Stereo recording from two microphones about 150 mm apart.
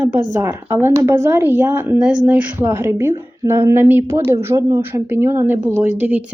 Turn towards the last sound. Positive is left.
turn(degrees=-10)  # may be behind; listen again after turning